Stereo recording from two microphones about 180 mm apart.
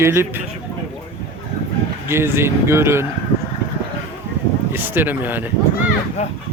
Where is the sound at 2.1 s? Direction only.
15° right (ahead or behind).